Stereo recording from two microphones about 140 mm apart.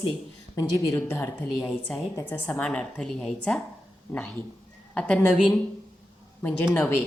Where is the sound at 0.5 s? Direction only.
20° left (ahead or behind).